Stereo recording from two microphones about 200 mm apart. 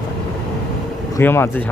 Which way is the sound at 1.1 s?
10° left (ahead or behind).